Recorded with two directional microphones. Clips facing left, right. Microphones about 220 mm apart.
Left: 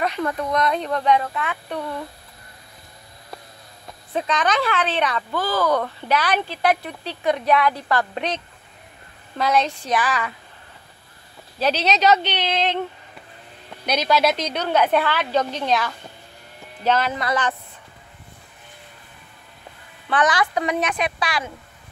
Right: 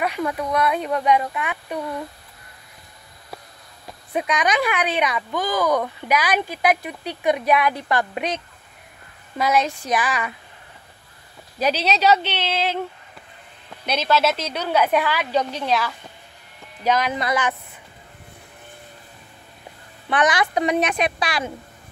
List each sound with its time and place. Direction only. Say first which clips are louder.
0.0 s speech: even; 10° right (ahead or behind)
4.1 s speech: even; 10° right (ahead or behind)
9.4 s speech: even; 10° right (ahead or behind)
11.6 s speech: even; 10° right (ahead or behind)
13.8 s a woman's voice: left 1 dB; 5° right (ahead or behind)
20.1 s speech: even; 15° right (ahead or behind)